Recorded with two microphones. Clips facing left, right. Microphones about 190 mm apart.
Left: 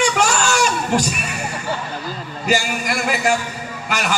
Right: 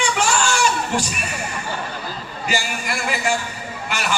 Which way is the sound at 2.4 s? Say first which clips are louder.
Left 5 dB; 45° left (ahead or behind).